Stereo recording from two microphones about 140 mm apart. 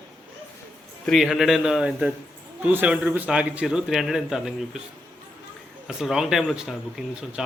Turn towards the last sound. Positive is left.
turn(degrees=-5)  # may be behind; listen again after turning